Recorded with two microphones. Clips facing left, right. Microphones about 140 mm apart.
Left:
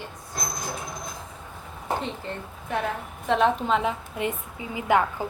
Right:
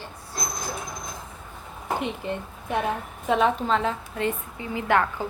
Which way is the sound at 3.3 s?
Centre (ahead or behind).